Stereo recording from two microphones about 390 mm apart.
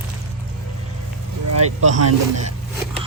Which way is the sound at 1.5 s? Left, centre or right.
Right.